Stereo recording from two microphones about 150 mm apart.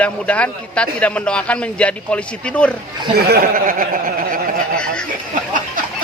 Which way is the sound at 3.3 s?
65° right (ahead or behind).